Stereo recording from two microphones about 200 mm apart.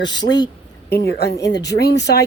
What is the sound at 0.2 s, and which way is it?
Speech, 20° left (ahead or behind).